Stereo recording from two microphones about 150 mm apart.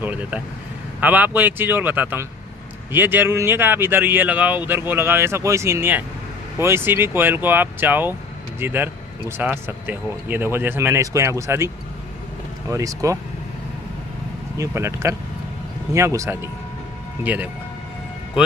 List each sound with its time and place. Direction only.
0.0 s speech: 10° right (ahead or behind)
14.6 s speech: 20° right (ahead or behind)